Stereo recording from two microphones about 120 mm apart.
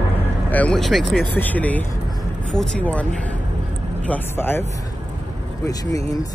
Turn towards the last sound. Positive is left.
turn(degrees=20)  # may be behind; listen again after turning